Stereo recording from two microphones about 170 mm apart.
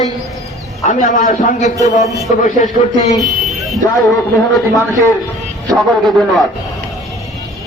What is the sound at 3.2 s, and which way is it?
Speech, centre (ahead or behind).